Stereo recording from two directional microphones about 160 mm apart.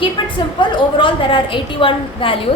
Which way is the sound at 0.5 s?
30° left (ahead or behind).